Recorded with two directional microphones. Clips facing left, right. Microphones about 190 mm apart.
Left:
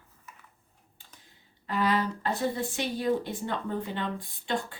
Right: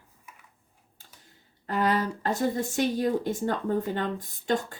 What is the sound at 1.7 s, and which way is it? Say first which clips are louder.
Speech: right 1 dB; 45° right (ahead or behind).